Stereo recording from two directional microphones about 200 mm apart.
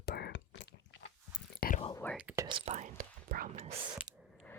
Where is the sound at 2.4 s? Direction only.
30° right (ahead or behind); by 3.5 s 45° right (ahead or behind).